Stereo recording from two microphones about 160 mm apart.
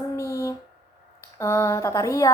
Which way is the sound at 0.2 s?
20° left (ahead or behind).